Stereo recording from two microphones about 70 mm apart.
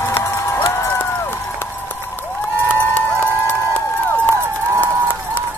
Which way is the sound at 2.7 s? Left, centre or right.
Left.